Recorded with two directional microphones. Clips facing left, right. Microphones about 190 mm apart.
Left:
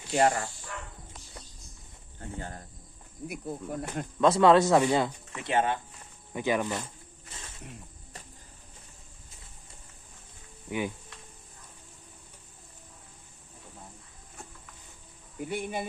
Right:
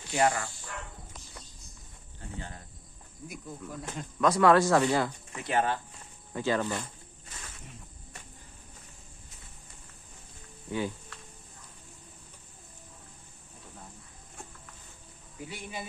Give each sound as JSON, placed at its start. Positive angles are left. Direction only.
{"t": 0.1, "sound": "speech", "side_deg": 35}
{"t": 3.2, "sound": "speech", "side_deg": 60}
{"t": 4.2, "sound": "speech", "side_deg": 25}
{"t": 10.7, "sound": "insect", "side_deg": 15}
{"t": 15.4, "sound": "speech", "side_deg": 55}